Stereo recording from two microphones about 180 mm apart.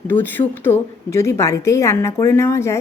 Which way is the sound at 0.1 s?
10° left (ahead or behind).